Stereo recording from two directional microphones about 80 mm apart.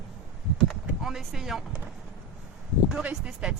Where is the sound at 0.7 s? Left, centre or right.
Centre.